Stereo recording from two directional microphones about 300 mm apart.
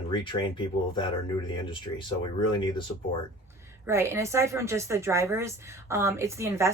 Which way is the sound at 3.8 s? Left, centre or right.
Centre.